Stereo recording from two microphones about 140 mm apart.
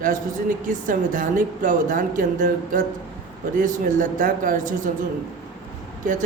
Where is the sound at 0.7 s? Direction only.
70° right (ahead or behind).